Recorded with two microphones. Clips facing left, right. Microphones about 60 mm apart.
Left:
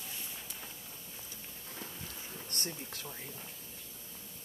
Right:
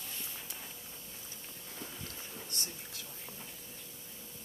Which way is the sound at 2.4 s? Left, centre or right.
Left.